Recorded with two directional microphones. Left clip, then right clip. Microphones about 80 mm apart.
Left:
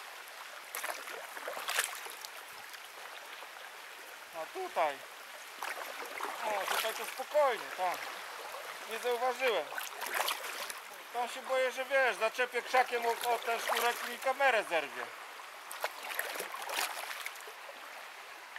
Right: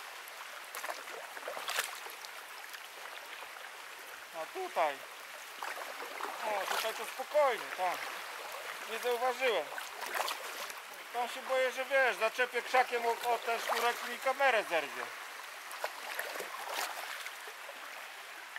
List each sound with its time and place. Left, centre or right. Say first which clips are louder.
1.4 s boat: left 2 dB; centre
4.4 s speech: even; centre
5.6 s a sound: left 1 dB; left
6.4 s speech: left 1 dB; centre
7.3 s speech: even; centre
9.4 s speech: even; centre
9.8 s boat: left 1 dB; centre
11.1 s speech: even; centre
13.0 s speech: even; centre
13.3 s speech: even; centre
13.7 s speech: left 1 dB; centre
14.2 s speech: even; centre
15.8 s boat: left 2 dB; centre